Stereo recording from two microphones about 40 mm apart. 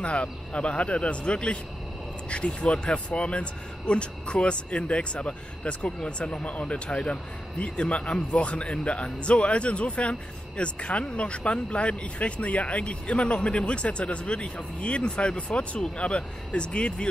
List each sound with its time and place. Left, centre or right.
0.0 s speech: left